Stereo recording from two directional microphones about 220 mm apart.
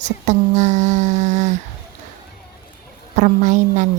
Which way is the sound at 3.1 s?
35° right (ahead or behind).